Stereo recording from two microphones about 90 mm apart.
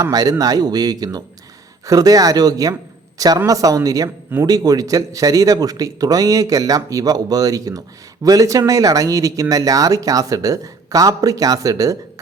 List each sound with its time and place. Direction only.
0.0 s speech: 45° right (ahead or behind)